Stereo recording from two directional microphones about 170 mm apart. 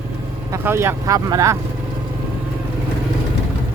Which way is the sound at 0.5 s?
15° right (ahead or behind).